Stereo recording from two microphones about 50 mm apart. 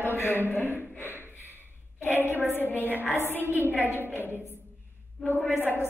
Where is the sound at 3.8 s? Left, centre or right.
Right.